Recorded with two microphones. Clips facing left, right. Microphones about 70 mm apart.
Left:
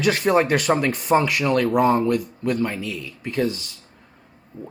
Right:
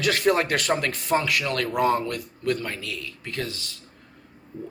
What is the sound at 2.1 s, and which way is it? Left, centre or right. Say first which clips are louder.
Speech: left 5 dB; centre.